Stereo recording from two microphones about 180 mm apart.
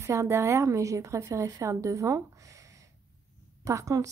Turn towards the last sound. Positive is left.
turn(degrees=-20)  # may be behind; listen again after turning